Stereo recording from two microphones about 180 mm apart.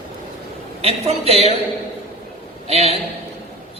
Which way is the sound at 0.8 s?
35° right (ahead or behind).